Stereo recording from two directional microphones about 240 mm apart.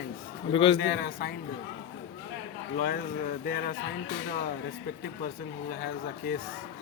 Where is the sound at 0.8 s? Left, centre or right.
Left.